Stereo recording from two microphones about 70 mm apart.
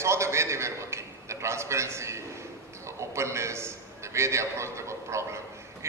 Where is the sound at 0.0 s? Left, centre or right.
Right.